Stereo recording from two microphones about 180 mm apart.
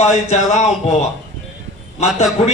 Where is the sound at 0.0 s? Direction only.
35° left (ahead or behind).